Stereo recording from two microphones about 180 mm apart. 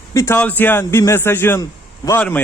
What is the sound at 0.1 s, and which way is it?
A man's voice, 15° left (ahead or behind).